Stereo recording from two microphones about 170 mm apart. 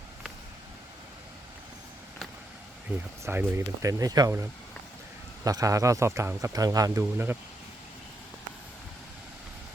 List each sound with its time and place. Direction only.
2.9 s speech: 10° right (ahead or behind)